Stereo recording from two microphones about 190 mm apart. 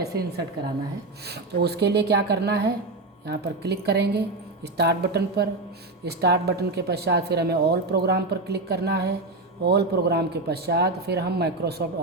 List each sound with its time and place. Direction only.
0.0 s speech: 60° right (ahead or behind)